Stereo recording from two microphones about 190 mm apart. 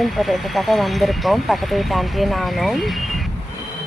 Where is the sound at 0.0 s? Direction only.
Centre (ahead or behind).